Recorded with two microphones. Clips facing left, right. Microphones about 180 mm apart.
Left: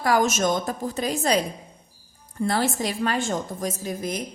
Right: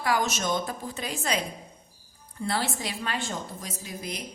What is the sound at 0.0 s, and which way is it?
A woman's voice, 45° left (ahead or behind).